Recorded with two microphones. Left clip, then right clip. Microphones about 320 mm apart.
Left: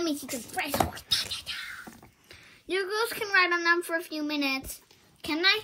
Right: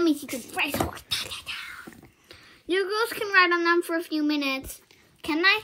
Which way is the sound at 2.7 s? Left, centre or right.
Right.